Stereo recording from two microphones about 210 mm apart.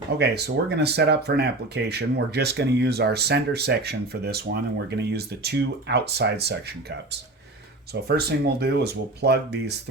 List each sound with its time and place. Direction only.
0.2 s speech: 50° right (ahead or behind)
8.0 s speech: 50° right (ahead or behind)